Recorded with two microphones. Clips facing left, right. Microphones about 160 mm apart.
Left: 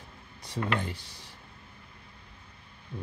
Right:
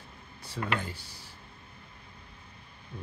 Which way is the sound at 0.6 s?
25° left (ahead or behind).